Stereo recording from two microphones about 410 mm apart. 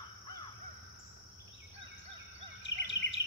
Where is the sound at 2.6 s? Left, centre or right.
Left.